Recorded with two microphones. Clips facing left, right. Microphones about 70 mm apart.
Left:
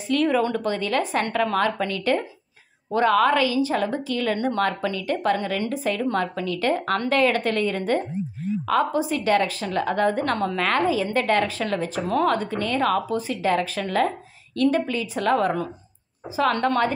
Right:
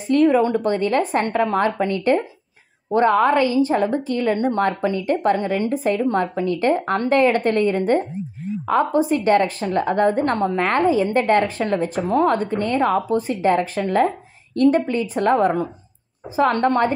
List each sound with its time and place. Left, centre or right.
0.1 s a woman's voice: right